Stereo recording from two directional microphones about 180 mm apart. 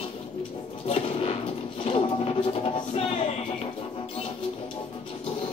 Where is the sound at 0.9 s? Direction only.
30° left (ahead or behind).